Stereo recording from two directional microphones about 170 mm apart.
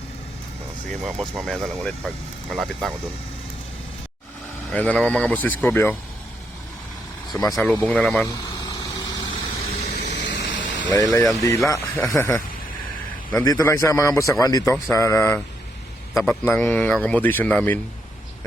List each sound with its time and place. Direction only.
0.9 s speech: centre (ahead or behind)
4.7 s a man's voice: 5° left (ahead or behind)
7.3 s speech: 20° left (ahead or behind)
7.6 s speech: 10° left (ahead or behind)
8.6 s vehicle: 20° left (ahead or behind)
9.8 s vehicle: 45° left (ahead or behind)
10.2 s vehicle: 90° left
10.9 s speech: 20° left (ahead or behind)
13.4 s a man's voice: 20° left (ahead or behind)